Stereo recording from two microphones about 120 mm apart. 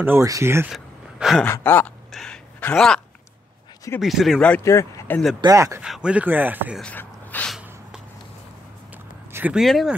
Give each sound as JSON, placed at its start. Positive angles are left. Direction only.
{"t": 0.0, "sound": "speech", "side_deg": -20}
{"t": 0.7, "sound": "a sound", "side_deg": 0}
{"t": 1.4, "sound": "sigh", "side_deg": 20}
{"t": 2.1, "sound": "speech", "side_deg": 5}
{"t": 4.0, "sound": "speech", "side_deg": 0}
{"t": 4.6, "sound": "speech", "side_deg": 25}
{"t": 5.4, "sound": "speech", "side_deg": -25}
{"t": 5.8, "sound": "speech", "side_deg": -5}
{"t": 6.8, "sound": "a sound", "side_deg": 15}
{"t": 8.9, "sound": "a sound", "side_deg": -15}
{"t": 9.6, "sound": "speech", "side_deg": 0}